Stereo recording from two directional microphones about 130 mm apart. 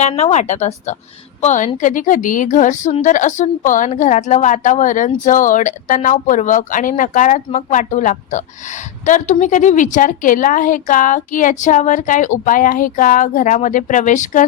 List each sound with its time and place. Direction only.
0.0 s a woman's voice: 60° left (ahead or behind)